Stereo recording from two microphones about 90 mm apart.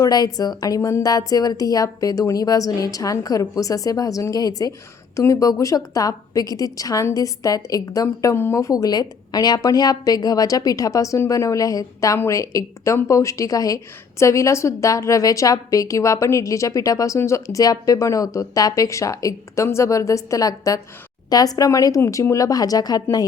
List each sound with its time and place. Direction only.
0.0 s a woman's voice: 45° left (ahead or behind); by 8.5 s 30° left (ahead or behind)
8.5 s a woman's voice: 40° left (ahead or behind)